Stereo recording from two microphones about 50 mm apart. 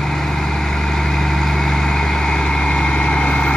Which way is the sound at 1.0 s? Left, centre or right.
Centre.